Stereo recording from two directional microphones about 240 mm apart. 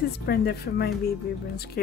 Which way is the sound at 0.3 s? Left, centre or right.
Left.